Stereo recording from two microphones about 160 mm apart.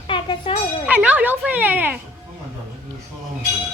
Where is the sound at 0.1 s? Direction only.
30° left (ahead or behind).